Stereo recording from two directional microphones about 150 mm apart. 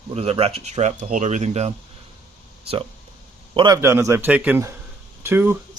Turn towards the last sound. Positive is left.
turn(degrees=-15)  # may be behind; listen again after turning